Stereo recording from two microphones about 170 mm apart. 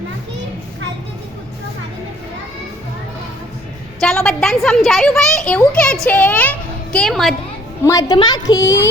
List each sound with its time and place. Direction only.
4.0 s a child's voice: 5° left (ahead or behind)
7.9 s a woman's voice: 20° left (ahead or behind)